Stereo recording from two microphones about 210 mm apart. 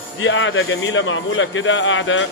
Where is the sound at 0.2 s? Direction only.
65° left (ahead or behind).